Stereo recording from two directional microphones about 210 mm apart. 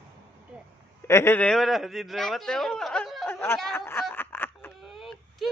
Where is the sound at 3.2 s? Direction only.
10° left (ahead or behind).